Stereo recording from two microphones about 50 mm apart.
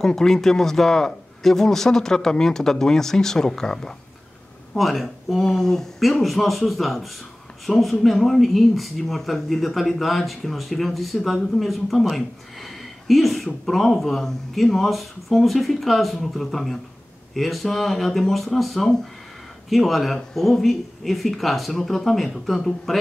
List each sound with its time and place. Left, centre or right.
0.0 s speech: centre